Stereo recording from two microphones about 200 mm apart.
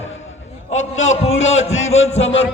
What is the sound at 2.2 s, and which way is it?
Speech, 70° left (ahead or behind).